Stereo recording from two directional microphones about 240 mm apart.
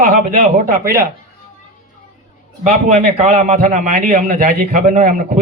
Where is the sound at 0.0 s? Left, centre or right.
Right.